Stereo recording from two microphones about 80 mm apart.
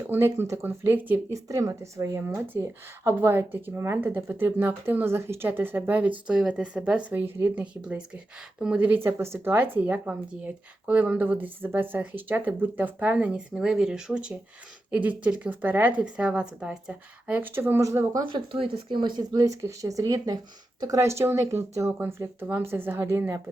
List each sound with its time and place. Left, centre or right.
0.1 s speech: right
0.9 s speech: right
1.3 s speech: right; by 7.1 s centre
7.1 s speech: right
17.5 s speech: right
17.8 s speech: right
18.3 s speech: right
19.3 s speech: right
22.4 s speech: right